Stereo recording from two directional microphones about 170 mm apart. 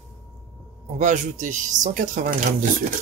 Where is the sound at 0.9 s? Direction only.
45° right (ahead or behind).